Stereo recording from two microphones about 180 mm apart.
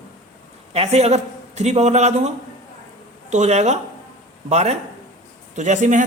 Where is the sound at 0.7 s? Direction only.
35° right (ahead or behind).